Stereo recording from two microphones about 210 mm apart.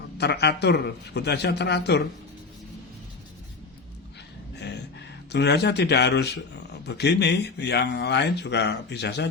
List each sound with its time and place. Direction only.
0.2 s speech: 50° left (ahead or behind)
4.5 s a sound: 55° left (ahead or behind)
6.8 s speech: 50° left (ahead or behind)